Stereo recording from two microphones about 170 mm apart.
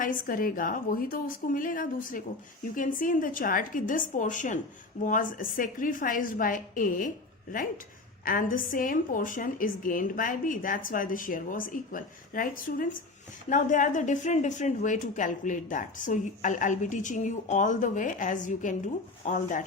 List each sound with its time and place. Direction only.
0.0 s a woman's voice: 55° left (ahead or behind)
8.2 s a woman's voice: 55° left (ahead or behind)